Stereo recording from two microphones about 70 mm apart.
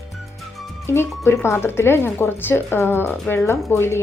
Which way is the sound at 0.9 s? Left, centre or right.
Left.